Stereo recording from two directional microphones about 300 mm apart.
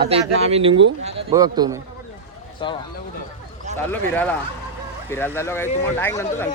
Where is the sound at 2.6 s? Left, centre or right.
Centre.